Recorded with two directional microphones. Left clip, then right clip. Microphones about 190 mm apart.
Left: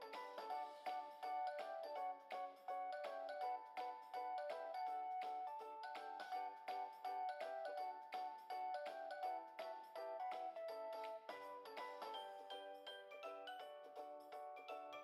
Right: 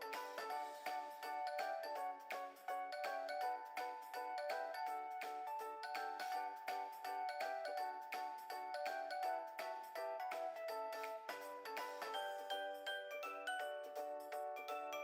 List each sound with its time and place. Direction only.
0.4 s music: 30° right (ahead or behind)
2.0 s music: 35° right (ahead or behind)
5.9 s music: 30° right (ahead or behind)
11.8 s music: 30° right (ahead or behind)